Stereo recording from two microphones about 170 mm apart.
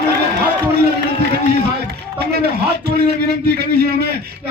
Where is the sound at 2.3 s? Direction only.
70° right (ahead or behind).